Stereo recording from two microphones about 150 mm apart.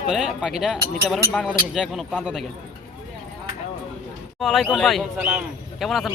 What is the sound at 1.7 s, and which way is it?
Speech, 5° right (ahead or behind).